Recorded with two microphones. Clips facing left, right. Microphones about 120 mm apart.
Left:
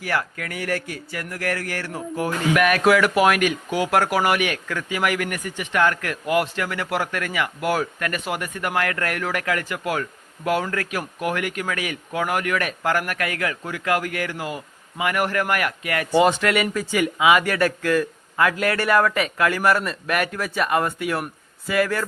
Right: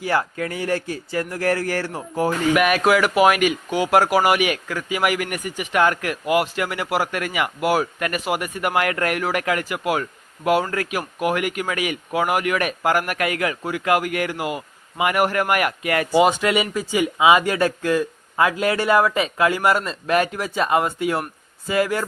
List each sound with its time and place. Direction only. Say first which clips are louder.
0.0 s speech: right 4 dB; 25° right (ahead or behind)
2.6 s speech: left 1 dB; 10° right (ahead or behind)